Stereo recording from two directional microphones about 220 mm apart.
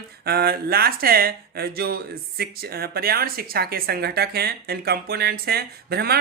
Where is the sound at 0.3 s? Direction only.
45° right (ahead or behind).